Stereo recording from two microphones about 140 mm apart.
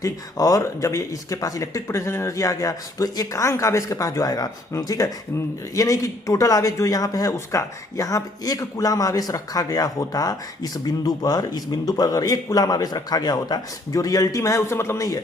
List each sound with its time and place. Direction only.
0.0 s speech: 25° left (ahead or behind)